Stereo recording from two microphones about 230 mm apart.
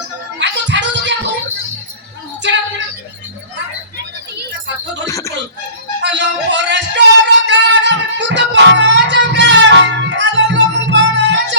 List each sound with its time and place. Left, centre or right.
0.3 s music: right
2.4 s a sound: right
5.0 s cricket: centre
6.0 s music: right